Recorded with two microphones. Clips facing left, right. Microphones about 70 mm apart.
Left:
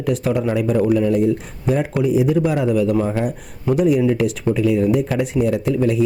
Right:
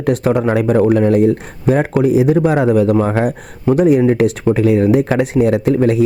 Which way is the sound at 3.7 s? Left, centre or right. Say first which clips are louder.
Right 5 dB; right.